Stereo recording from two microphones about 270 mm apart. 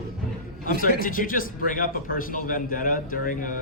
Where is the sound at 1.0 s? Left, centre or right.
Left.